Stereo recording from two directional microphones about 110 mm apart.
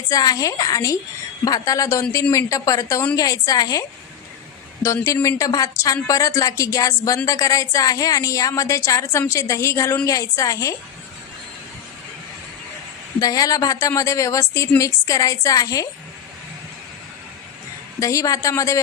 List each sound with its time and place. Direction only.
0.1 s speech: 35° left (ahead or behind)
5.0 s speech: 30° left (ahead or behind)
13.1 s speech: 35° left (ahead or behind)
18.0 s speech: 30° left (ahead or behind)